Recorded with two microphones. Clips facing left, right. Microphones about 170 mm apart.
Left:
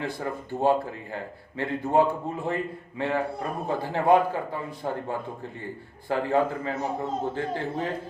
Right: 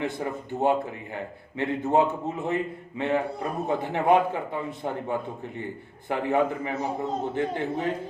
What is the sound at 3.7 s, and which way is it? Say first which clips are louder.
A man's voice: left 1 dB; 20° right (ahead or behind).